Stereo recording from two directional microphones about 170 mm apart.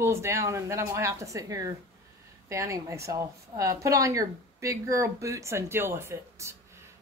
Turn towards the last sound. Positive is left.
turn(degrees=-15)  # may be behind; listen again after turning